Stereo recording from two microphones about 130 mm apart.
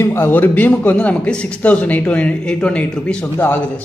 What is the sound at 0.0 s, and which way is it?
A man's voice, 20° left (ahead or behind).